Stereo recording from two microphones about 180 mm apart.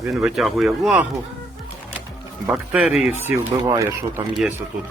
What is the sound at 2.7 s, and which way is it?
Speech, 5° right (ahead or behind).